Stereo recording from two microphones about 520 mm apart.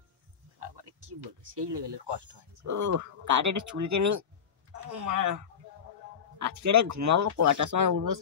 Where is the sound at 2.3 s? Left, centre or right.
Right.